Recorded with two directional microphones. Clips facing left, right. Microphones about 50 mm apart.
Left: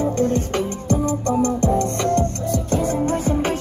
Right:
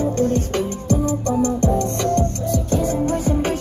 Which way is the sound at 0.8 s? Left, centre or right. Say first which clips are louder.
Even; left.